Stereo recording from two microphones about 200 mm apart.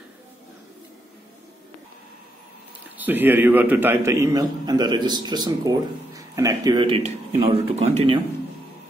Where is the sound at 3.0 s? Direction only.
10° right (ahead or behind); by 8.0 s 35° right (ahead or behind).